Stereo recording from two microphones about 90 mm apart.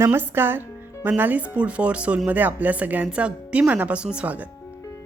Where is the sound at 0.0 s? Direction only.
25° right (ahead or behind).